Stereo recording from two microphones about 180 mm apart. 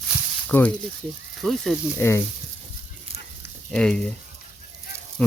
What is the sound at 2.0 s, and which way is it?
Speech, 15° left (ahead or behind).